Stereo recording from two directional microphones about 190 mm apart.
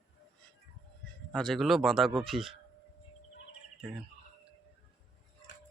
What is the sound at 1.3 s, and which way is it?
Speech, centre (ahead or behind).